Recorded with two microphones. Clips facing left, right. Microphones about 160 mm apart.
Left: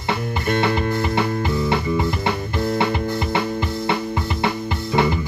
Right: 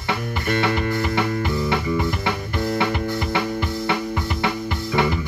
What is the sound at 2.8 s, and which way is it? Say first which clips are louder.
Music: left 1 dB; 25° left (ahead or behind).